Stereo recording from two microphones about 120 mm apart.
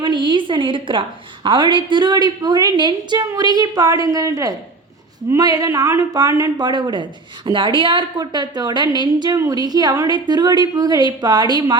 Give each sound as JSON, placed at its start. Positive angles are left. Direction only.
{"t": 0.0, "sound": "speech", "side_deg": -40}